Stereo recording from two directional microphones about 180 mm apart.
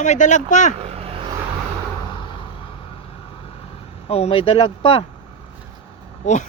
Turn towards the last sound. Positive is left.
turn(degrees=40)  # may be behind; listen again after turning